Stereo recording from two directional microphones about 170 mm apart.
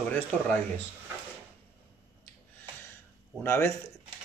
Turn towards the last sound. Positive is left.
turn(degrees=15)  # may be behind; listen again after turning